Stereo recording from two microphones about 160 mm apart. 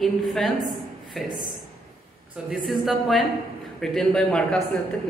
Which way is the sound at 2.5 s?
Centre (ahead or behind).